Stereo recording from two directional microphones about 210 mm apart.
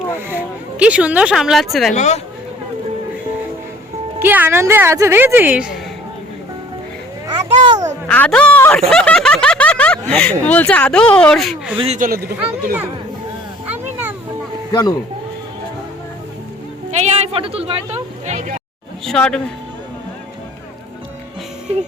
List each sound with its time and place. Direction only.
0.3 s speech: 5° right (ahead or behind)
2.0 s speech: 30° left (ahead or behind)
4.2 s speech: 10° right (ahead or behind)
7.3 s a sound: 20° right (ahead or behind)
8.0 s speech: 5° left (ahead or behind)
8.9 s snicker: 5° left (ahead or behind)
10.4 s speech: 5° left (ahead or behind)
11.8 s speech: 35° right (ahead or behind)
13.8 s a sound: 10° right (ahead or behind)
14.7 s speech: 20° left (ahead or behind)
16.9 s speech: 30° right (ahead or behind)
19.0 s speech: 5° left (ahead or behind)